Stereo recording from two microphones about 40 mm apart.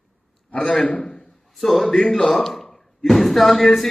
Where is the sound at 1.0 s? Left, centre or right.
Left.